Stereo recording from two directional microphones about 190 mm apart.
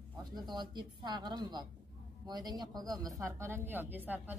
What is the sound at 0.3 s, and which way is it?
A woman's voice, 20° right (ahead or behind).